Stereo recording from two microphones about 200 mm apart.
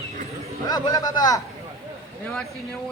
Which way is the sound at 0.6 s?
20° left (ahead or behind).